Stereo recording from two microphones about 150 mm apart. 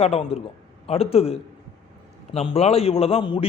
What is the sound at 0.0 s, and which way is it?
A man's voice, 45° left (ahead or behind).